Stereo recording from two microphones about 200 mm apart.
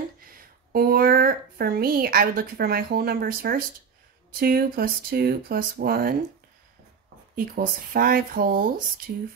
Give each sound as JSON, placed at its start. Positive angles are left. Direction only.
{"t": 0.2, "sound": "speech", "side_deg": -45}
{"t": 7.3, "sound": "speech", "side_deg": -45}